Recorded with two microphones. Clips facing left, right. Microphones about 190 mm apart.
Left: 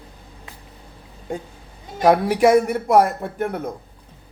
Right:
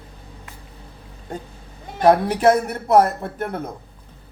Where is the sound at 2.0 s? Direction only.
10° left (ahead or behind).